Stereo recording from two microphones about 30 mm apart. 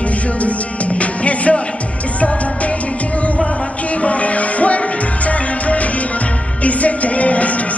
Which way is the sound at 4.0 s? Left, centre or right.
Left.